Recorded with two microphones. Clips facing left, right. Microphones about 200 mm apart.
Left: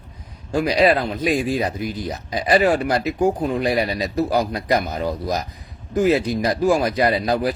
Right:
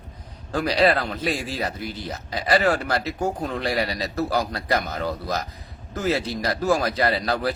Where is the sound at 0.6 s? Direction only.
15° left (ahead or behind).